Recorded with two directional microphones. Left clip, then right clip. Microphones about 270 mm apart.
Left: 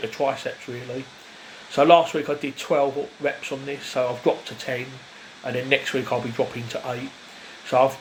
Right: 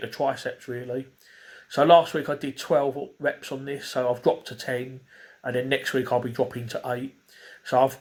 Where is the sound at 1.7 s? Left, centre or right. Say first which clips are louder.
Left 1 dB; right.